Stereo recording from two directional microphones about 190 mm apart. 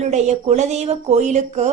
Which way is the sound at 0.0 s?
35° right (ahead or behind).